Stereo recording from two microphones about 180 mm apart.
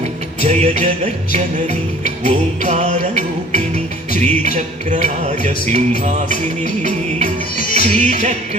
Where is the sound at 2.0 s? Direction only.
40° right (ahead or behind).